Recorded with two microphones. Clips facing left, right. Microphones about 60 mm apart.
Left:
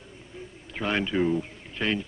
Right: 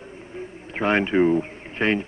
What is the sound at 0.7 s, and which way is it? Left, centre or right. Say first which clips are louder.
Speech: right 6 dB; right.